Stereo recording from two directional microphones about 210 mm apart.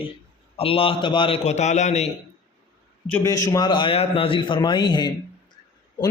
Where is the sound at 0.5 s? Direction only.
25° left (ahead or behind).